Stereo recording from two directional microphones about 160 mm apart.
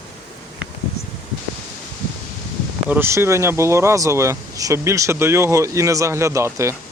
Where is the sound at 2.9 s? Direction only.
15° right (ahead or behind).